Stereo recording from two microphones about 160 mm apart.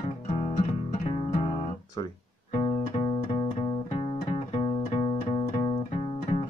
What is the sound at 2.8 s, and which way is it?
Music, 50° left (ahead or behind).